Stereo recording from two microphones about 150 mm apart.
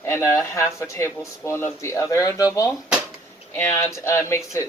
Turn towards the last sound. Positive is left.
turn(degrees=20)  # may be behind; listen again after turning